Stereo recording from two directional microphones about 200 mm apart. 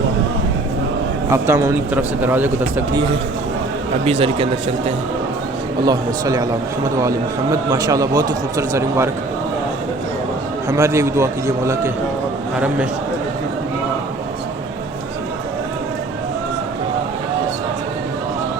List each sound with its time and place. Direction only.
1.3 s a man's voice: 15° right (ahead or behind)
4.0 s a man's voice: 30° right (ahead or behind)
5.8 s a man's voice: 20° right (ahead or behind)
10.7 s a man's voice: 15° right (ahead or behind)